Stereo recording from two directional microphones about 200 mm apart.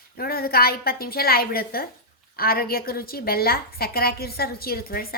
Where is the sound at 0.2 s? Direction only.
50° left (ahead or behind).